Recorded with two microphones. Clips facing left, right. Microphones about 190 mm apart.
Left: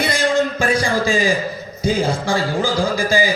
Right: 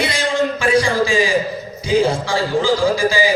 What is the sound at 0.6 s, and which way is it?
Music, 45° left (ahead or behind).